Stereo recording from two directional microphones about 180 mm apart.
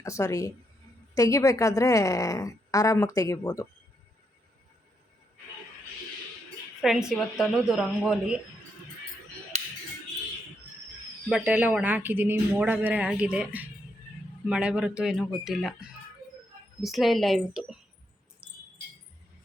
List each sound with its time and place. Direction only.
0.0 s a woman's voice: 15° left (ahead or behind)
6.8 s a woman's voice: 5° right (ahead or behind)
11.3 s a woman's voice: 5° right (ahead or behind)